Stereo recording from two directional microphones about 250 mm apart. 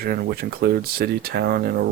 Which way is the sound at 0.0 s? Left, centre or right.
Right.